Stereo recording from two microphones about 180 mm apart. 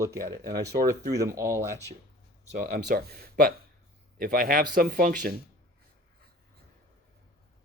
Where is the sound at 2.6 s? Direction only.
65° right (ahead or behind).